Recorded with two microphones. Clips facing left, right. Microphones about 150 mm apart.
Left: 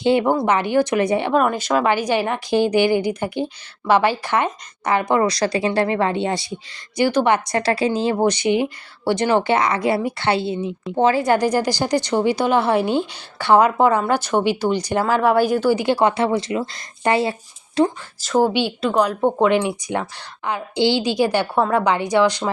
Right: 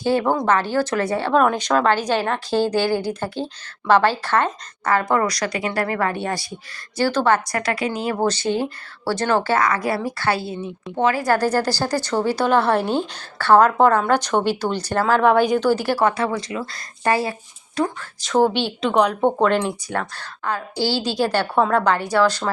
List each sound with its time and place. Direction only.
0.0 s a woman's voice: 20° left (ahead or behind)
1.4 s a woman's voice: 5° left (ahead or behind)
15.8 s speech: 20° left (ahead or behind)
18.2 s a woman's voice: 5° left (ahead or behind)